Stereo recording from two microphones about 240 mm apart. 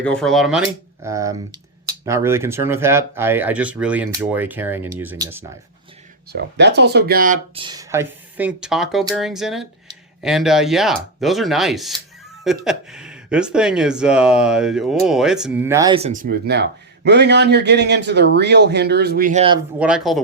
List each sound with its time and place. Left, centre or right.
0.0 s speech: centre
6.3 s speech: right
7.5 s speech: centre
19.8 s speech: centre